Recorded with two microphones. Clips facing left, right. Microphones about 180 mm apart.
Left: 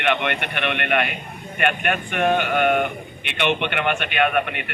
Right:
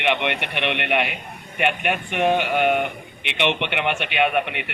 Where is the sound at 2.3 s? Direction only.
5° right (ahead or behind).